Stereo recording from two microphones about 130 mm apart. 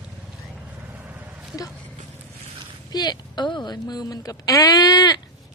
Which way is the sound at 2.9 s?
35° left (ahead or behind).